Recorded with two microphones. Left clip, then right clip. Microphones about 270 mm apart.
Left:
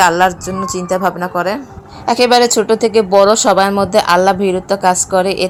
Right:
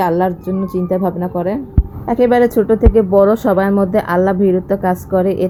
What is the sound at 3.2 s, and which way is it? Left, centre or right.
Speech, centre.